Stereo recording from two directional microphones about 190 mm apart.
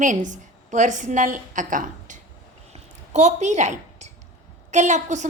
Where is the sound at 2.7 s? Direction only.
35° right (ahead or behind).